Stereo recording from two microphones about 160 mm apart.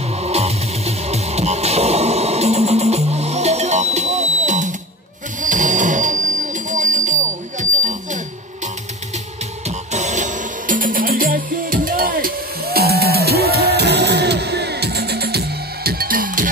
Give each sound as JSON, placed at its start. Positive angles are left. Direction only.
{"t": 0.2, "sound": "music", "side_deg": -40}
{"t": 9.7, "sound": "music", "side_deg": -45}